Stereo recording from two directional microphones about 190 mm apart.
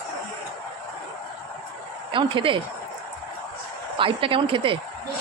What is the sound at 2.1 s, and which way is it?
Speech, 25° right (ahead or behind).